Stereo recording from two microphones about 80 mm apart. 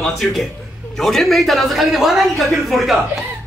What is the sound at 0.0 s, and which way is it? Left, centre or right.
Speech, centre.